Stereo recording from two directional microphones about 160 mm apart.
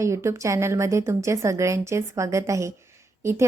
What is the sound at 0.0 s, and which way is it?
A woman's voice, 20° right (ahead or behind).